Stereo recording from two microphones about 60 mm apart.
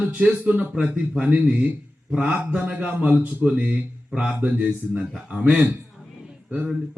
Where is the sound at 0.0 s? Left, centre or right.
Centre.